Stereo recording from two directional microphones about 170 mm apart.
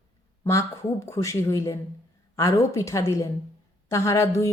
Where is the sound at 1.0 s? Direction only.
20° left (ahead or behind).